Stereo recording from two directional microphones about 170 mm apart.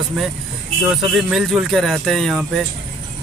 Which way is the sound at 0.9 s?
Centre (ahead or behind).